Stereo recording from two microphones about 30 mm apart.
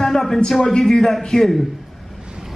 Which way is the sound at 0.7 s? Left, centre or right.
Centre.